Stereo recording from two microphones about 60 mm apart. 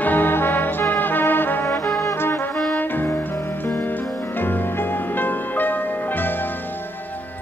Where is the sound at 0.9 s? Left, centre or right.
Left.